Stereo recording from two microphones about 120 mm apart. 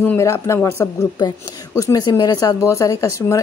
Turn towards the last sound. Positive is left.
turn(degrees=25)  # may be behind; listen again after turning